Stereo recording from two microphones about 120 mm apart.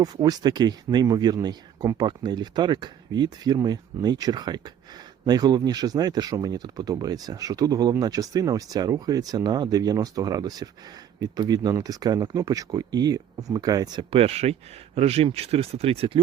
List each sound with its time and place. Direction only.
0.0 s speech: 35° right (ahead or behind)
14.1 s speech: 55° right (ahead or behind)